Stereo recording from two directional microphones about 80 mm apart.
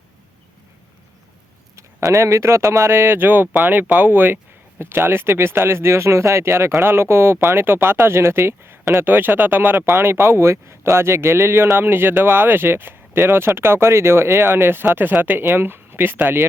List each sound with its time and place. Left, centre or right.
1.7 s speech: right